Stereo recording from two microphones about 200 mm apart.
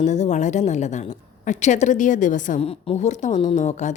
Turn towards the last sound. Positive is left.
turn(degrees=35)  # may be behind; listen again after turning